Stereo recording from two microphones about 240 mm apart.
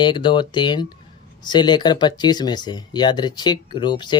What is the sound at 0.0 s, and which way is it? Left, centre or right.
Speech, centre.